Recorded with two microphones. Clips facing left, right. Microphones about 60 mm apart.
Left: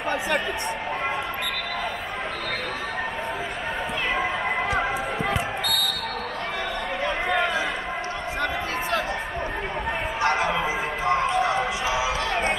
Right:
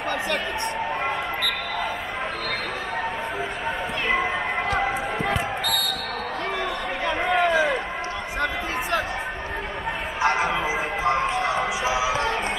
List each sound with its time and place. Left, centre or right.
4.6 s basketball bounce: centre
7.2 s run: centre
10.2 s music: centre
12.1 s a sound: right